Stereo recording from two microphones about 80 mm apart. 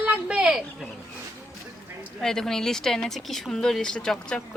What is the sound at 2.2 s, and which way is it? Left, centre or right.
A woman's voice, centre.